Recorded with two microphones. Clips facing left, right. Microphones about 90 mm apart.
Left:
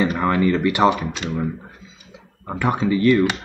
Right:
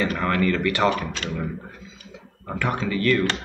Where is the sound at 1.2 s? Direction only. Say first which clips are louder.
Left 4 dB; 15° left (ahead or behind).